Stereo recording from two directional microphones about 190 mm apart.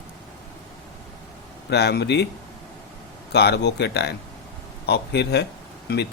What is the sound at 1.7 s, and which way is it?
Speech, 60° left (ahead or behind).